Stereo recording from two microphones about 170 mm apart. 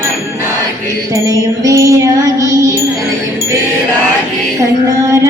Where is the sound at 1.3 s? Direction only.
20° right (ahead or behind).